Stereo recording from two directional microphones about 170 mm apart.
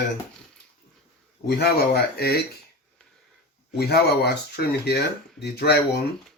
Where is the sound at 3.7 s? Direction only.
70° left (ahead or behind).